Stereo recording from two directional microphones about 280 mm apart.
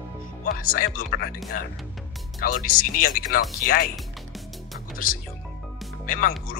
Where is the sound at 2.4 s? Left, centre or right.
Left.